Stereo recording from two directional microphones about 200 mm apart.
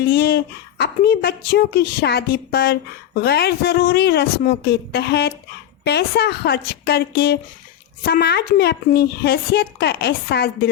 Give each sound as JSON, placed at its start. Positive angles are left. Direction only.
{"t": 0.0, "sound": "speech", "side_deg": 50}